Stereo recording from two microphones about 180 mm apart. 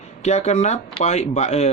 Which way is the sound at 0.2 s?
40° left (ahead or behind).